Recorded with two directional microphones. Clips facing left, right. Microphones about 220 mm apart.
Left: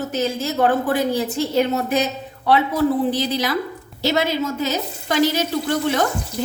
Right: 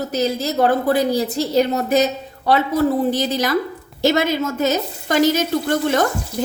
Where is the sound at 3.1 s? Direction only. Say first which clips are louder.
Right 2 dB; 45° right (ahead or behind).